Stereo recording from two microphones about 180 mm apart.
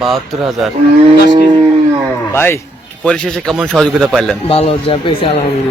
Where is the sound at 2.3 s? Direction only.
15° left (ahead or behind).